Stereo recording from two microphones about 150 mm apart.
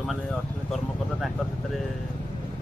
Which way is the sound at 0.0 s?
Centre (ahead or behind).